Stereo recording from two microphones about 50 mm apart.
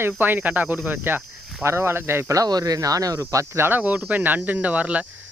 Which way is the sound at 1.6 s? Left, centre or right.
Right.